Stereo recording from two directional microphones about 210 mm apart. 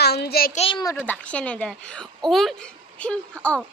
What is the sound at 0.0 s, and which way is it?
Child singing, 50° left (ahead or behind).